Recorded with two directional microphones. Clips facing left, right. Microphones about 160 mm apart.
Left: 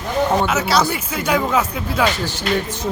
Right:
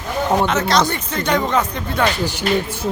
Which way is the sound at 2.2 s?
10° right (ahead or behind).